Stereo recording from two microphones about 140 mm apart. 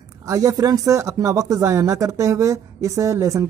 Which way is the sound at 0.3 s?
25° right (ahead or behind).